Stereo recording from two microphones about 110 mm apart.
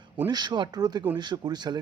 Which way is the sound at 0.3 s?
40° right (ahead or behind).